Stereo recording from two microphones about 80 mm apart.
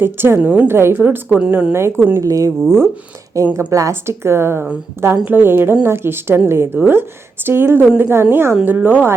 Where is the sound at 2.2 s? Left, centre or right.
Right.